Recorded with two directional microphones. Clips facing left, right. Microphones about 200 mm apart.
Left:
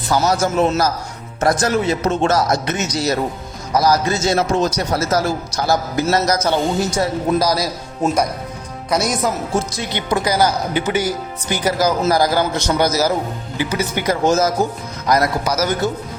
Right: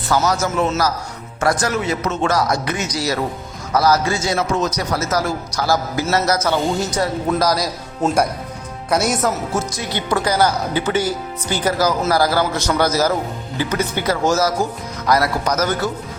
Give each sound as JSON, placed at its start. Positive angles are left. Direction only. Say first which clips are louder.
{"t": 0.3, "sound": "a man's voice", "louder": "left 3 dB", "side_deg": 30}
{"t": 3.7, "sound": "a man's voice", "louder": "even", "side_deg": 15}
{"t": 6.9, "sound": "speech", "louder": "left 2 dB", "side_deg": 0}
{"t": 9.9, "sound": "a man's voice", "louder": "even", "side_deg": 15}
{"t": 15.4, "sound": "speech", "louder": "even", "side_deg": 10}